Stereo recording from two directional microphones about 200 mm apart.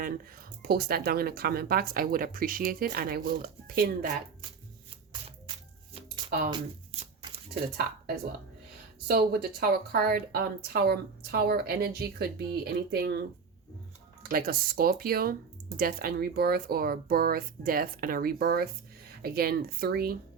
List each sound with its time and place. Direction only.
0.0 s a woman's voice: 50° right (ahead or behind)
6.5 s a sound: 30° right (ahead or behind)
9.0 s a woman's voice: 50° right (ahead or behind)